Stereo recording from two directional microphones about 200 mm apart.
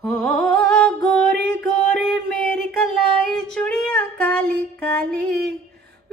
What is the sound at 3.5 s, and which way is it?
Female singing, 5° left (ahead or behind).